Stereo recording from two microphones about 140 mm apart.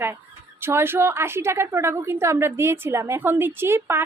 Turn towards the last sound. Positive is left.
turn(degrees=-20)  # may be behind; listen again after turning